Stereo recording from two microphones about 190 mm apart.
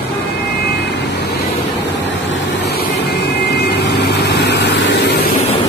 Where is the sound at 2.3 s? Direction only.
60° left (ahead or behind).